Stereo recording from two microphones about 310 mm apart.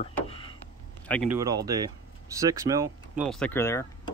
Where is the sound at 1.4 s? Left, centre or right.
Centre.